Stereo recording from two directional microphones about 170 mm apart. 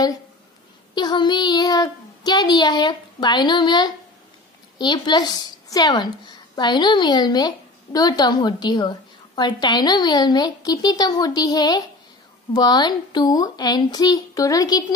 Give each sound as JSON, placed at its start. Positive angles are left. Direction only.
{"t": 0.9, "sound": "a woman's voice", "side_deg": 25}